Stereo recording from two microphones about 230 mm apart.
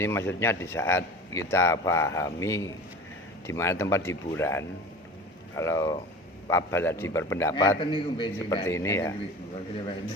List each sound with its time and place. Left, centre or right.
0.0 s a man's voice: centre